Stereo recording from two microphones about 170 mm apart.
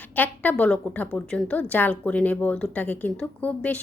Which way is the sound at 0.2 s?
10° left (ahead or behind).